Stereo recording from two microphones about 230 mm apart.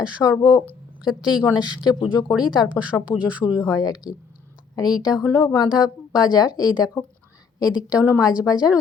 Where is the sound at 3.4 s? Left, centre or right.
Centre.